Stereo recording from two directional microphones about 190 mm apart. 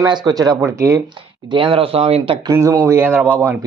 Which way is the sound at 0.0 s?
20° right (ahead or behind).